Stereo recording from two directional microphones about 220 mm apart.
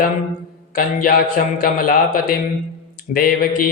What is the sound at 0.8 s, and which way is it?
A man's voice, 40° left (ahead or behind).